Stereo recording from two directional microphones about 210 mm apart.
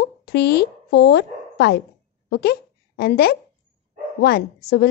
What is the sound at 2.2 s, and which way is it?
A woman's voice, 50° left (ahead or behind).